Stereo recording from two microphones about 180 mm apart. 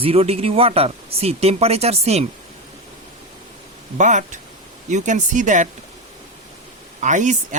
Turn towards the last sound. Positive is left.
turn(degrees=-45)  # may be behind; listen again after turning